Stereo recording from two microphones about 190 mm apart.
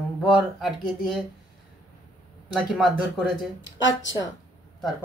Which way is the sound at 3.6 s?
75° left (ahead or behind).